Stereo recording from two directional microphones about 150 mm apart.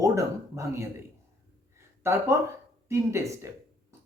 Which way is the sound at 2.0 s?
20° right (ahead or behind).